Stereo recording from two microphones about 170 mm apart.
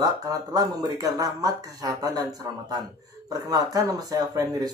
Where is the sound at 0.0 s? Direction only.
20° right (ahead or behind).